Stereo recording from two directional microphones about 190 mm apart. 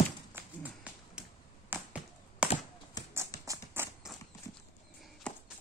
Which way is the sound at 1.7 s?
5° right (ahead or behind).